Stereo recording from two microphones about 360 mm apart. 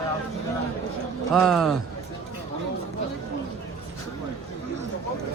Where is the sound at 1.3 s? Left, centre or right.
Centre.